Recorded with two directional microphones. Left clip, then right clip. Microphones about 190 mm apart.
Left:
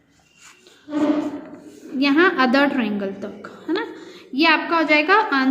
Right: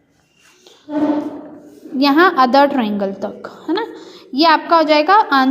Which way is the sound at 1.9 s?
25° right (ahead or behind).